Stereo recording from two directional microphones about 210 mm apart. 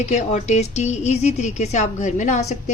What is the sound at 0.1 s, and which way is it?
A woman's voice, 35° left (ahead or behind).